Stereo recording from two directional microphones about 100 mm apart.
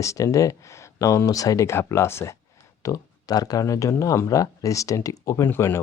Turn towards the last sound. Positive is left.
turn(degrees=25)  # may be behind; listen again after turning